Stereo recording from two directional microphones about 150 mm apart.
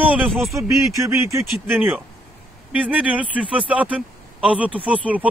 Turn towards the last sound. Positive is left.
turn(degrees=-10)  # may be behind; listen again after turning